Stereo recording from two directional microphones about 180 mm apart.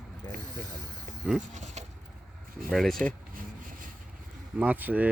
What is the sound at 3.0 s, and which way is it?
Rub, 50° right (ahead or behind).